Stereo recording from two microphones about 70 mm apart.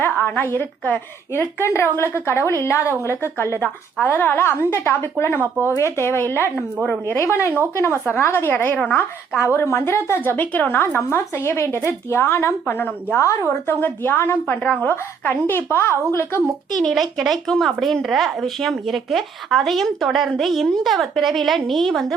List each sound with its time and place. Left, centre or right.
0.0 s a woman's voice: left
5.6 s a woman's voice: left
13.1 s speech: left
13.5 s a woman's voice: left
16.8 s speech: centre